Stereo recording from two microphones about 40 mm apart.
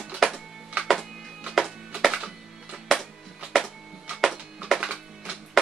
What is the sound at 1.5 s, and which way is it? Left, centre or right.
Music, centre.